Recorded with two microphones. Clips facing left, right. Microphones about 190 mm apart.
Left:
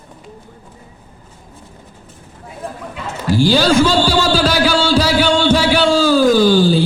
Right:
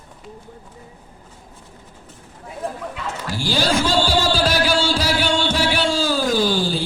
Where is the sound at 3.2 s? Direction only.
25° left (ahead or behind).